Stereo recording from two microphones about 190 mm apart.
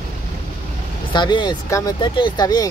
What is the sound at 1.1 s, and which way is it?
Speech, 25° left (ahead or behind).